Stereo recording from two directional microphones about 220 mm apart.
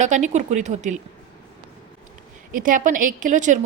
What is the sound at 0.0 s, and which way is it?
Speech, 35° right (ahead or behind).